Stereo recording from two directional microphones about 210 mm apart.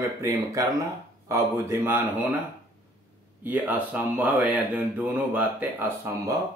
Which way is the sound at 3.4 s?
5° right (ahead or behind).